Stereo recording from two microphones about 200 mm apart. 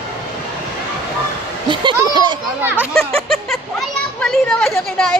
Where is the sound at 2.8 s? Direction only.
Centre (ahead or behind).